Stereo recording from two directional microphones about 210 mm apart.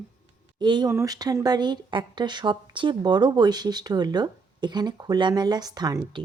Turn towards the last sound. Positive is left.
turn(degrees=-20)  # may be behind; listen again after turning